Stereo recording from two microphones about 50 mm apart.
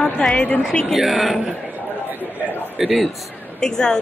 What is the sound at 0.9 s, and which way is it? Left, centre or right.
Speech, centre.